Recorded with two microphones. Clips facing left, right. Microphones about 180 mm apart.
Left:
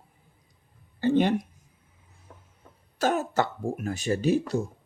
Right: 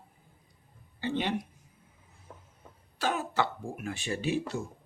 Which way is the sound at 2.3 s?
Centre (ahead or behind).